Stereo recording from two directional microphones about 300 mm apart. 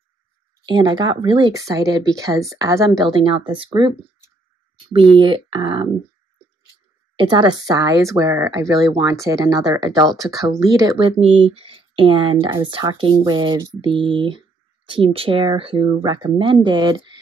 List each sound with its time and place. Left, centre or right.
0.7 s speech: centre
4.9 s speech: centre
7.2 s speech: centre